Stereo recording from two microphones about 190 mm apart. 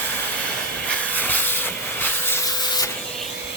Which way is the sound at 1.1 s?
10° left (ahead or behind).